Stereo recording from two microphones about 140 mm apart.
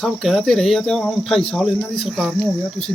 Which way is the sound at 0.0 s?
Centre (ahead or behind).